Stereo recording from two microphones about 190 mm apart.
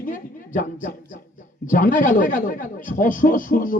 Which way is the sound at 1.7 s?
45° left (ahead or behind).